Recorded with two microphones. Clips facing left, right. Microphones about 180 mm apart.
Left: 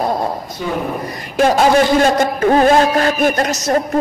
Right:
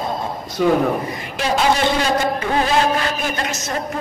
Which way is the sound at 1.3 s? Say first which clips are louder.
Left 7 dB; 45° left (ahead or behind).